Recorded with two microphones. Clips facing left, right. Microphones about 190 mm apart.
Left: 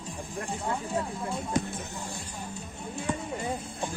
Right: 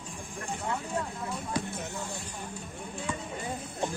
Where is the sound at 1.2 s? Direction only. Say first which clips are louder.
Left 4 dB; 25° left (ahead or behind).